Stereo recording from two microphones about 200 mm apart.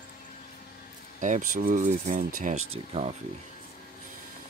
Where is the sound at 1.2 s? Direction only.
40° right (ahead or behind).